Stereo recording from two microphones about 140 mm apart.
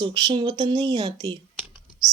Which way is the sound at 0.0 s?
35° right (ahead or behind).